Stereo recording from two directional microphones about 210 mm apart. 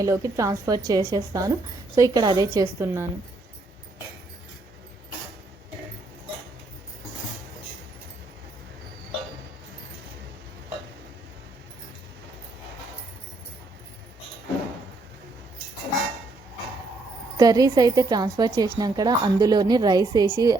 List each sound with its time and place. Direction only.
0.0 s a woman's voice: 15° right (ahead or behind)
17.3 s a woman's voice: 15° right (ahead or behind)